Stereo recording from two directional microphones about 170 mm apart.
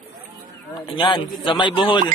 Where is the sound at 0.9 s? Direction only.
30° left (ahead or behind).